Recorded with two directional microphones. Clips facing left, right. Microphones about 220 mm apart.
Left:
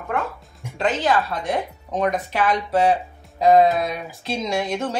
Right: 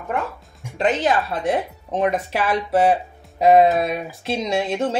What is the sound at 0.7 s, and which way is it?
Speech, 20° right (ahead or behind).